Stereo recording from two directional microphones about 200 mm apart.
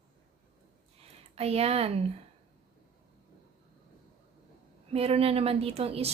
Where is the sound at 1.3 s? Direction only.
30° right (ahead or behind).